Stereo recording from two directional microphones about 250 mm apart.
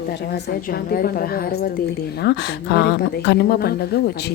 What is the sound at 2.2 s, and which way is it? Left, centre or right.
A woman's voice, left.